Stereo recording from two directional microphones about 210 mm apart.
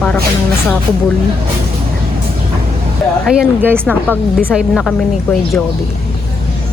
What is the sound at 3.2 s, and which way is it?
Speech, 5° right (ahead or behind).